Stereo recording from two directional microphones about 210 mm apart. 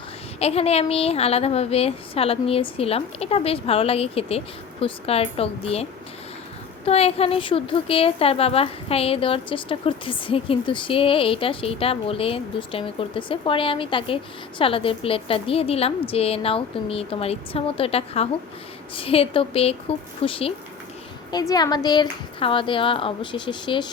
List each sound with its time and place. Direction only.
0.3 s a woman's voice: 30° left (ahead or behind)